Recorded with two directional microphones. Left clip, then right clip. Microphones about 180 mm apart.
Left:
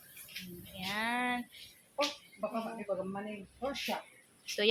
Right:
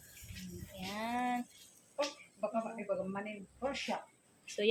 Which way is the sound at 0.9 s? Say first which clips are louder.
Left 2 dB; 5° left (ahead or behind).